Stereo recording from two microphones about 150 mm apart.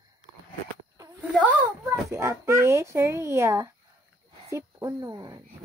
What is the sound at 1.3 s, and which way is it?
Speech, 10° right (ahead or behind).